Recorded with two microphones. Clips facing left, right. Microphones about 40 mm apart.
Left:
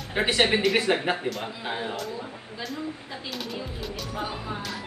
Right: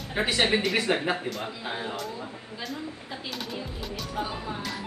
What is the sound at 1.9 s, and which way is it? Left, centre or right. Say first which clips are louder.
Speech: left 1 dB; centre.